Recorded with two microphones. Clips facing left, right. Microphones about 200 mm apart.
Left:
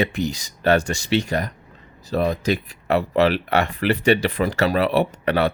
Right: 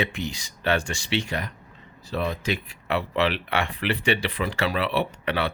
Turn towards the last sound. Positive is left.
turn(degrees=45)  # may be behind; listen again after turning